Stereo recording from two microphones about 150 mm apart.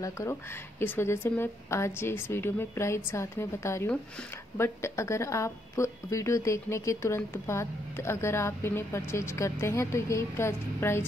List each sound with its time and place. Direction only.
0.0 s a woman's voice: 20° left (ahead or behind)